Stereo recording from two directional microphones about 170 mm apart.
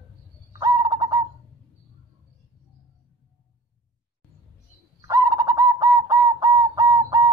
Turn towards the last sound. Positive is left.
turn(degrees=-20)  # may be behind; listen again after turning